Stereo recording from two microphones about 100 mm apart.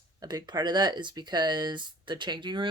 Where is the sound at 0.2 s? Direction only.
40° right (ahead or behind).